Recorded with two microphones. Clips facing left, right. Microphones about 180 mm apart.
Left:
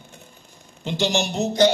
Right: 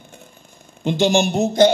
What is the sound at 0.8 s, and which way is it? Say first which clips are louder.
Speech: right 6 dB; 50° right (ahead or behind).